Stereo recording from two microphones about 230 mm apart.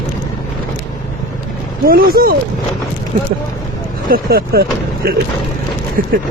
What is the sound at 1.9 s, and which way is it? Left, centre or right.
Speech, right.